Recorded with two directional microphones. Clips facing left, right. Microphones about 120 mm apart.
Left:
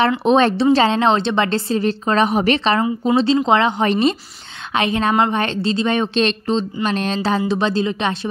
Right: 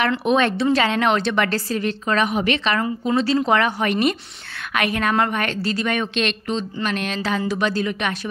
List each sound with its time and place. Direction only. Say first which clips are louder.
0.2 s a woman's voice: left 4 dB; 30° left (ahead or behind)